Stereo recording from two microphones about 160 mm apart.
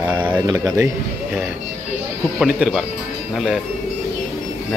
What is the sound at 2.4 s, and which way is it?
Speech, 5° right (ahead or behind).